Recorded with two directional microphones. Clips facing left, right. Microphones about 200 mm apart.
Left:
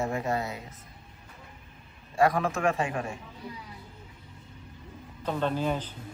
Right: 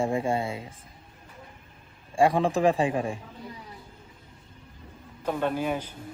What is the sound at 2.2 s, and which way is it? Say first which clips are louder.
A man's voice: right 3 dB; 30° right (ahead or behind).